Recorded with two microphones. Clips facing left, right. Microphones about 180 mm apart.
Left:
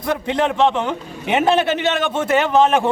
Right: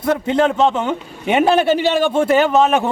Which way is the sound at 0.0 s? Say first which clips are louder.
Right 4 dB; 5° right (ahead or behind).